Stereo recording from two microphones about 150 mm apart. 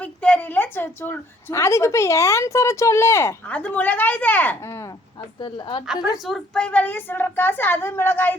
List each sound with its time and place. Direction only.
0.0 s a woman's voice: 10° left (ahead or behind)
5.4 s speech: 30° left (ahead or behind)
5.8 s a woman's voice: 5° right (ahead or behind); by 8.4 s 15° left (ahead or behind)